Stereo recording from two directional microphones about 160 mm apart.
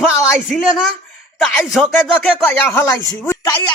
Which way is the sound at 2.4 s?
15° left (ahead or behind).